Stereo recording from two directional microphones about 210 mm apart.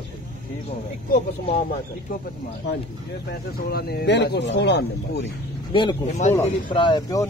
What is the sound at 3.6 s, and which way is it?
Speech, 50° left (ahead or behind).